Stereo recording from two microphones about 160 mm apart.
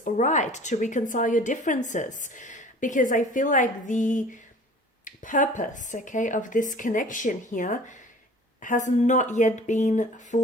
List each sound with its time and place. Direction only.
0.0 s a woman's voice: 50° left (ahead or behind)